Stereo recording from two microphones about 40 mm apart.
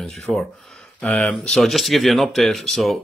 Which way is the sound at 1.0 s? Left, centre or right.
Left.